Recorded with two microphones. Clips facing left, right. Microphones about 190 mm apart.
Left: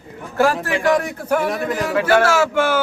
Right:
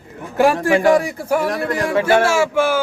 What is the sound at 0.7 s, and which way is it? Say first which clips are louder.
Speech: right 5 dB; 45° right (ahead or behind).